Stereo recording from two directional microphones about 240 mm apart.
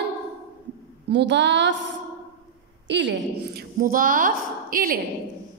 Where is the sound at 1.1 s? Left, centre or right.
Right.